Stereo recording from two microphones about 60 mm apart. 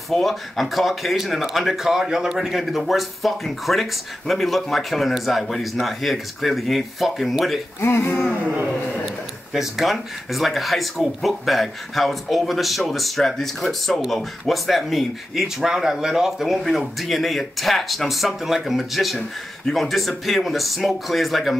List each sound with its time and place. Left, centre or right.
0.1 s speech: centre
7.8 s speech: left
9.5 s speech: centre